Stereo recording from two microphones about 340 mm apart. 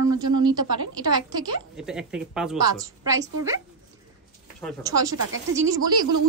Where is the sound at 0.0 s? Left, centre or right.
Right.